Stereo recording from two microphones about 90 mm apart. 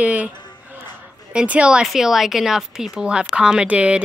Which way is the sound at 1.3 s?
10° right (ahead or behind).